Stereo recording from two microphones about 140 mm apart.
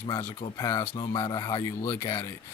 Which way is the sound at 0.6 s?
25° left (ahead or behind).